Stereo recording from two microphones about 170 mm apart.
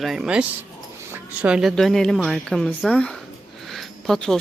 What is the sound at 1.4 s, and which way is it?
Speech, 5° right (ahead or behind).